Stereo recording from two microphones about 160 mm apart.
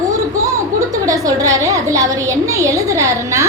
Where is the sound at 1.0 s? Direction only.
20° right (ahead or behind).